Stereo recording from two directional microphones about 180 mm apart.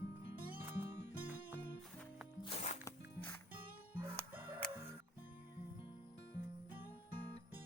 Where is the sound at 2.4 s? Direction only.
35° left (ahead or behind).